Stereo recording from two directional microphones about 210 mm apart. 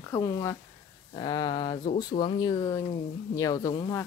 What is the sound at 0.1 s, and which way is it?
Speech, 15° left (ahead or behind).